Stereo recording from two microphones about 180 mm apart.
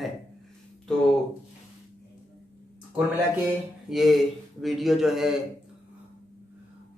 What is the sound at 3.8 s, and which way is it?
Speech, centre (ahead or behind).